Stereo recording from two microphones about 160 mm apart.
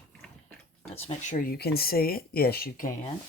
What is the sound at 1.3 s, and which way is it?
Speech, 65° left (ahead or behind).